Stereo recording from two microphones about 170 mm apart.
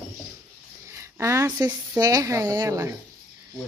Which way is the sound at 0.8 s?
15° right (ahead or behind).